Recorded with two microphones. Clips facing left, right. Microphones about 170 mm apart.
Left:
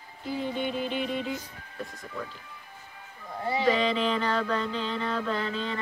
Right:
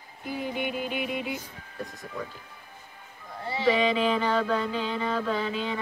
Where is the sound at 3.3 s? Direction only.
20° left (ahead or behind).